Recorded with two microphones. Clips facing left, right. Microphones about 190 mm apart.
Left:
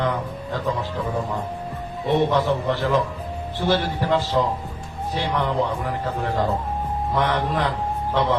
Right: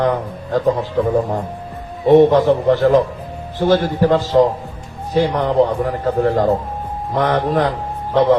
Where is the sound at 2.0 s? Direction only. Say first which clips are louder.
Right 10 dB; 45° right (ahead or behind).